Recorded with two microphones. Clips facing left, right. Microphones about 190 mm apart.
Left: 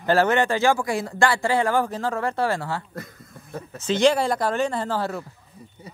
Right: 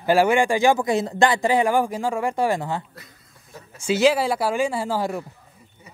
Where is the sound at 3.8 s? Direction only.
5° right (ahead or behind).